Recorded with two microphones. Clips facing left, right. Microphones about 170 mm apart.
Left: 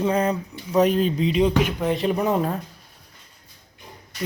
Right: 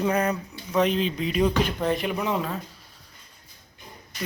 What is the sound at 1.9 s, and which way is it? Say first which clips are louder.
Speech: left 5 dB; 35° left (ahead or behind).